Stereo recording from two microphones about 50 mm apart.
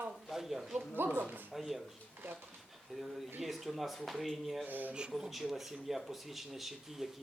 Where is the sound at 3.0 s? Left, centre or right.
Centre.